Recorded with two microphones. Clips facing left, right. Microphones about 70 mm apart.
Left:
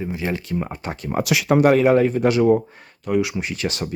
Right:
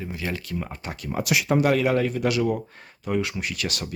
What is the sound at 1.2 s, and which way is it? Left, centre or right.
Speech, left.